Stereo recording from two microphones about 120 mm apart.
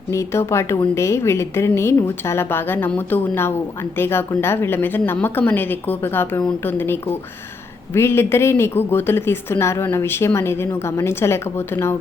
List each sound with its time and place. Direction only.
0.1 s a woman's voice: 25° left (ahead or behind)